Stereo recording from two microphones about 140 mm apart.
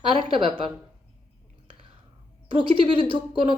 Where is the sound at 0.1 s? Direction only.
40° right (ahead or behind).